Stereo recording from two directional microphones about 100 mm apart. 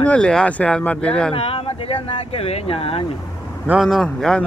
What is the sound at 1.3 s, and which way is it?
Speech, 60° left (ahead or behind).